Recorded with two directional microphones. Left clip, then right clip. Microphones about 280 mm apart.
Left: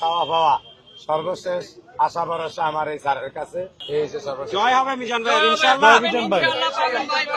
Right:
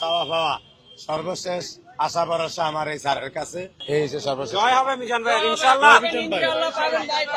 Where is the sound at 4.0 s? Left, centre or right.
Right.